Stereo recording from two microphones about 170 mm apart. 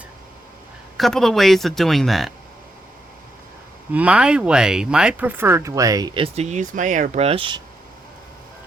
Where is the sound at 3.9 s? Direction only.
5° right (ahead or behind); by 7.6 s 30° right (ahead or behind).